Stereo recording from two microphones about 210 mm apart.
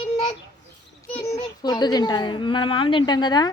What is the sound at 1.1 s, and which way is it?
A child's voice, 15° left (ahead or behind).